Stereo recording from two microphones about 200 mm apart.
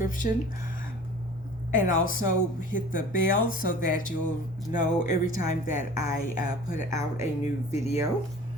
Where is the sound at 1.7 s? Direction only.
40° left (ahead or behind).